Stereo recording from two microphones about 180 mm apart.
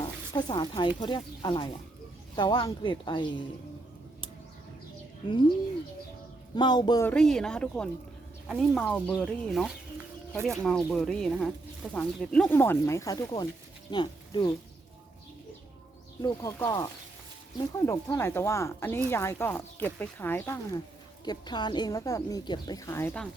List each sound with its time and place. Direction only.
0.0 s speech: 25° left (ahead or behind)
6.6 s speech: 25° left (ahead or behind)
7.1 s speech: 5° left (ahead or behind); by 14.5 s 25° left (ahead or behind)
16.2 s speech: 20° left (ahead or behind)
17.8 s speech: 15° left (ahead or behind)
21.2 s speech: 25° left (ahead or behind)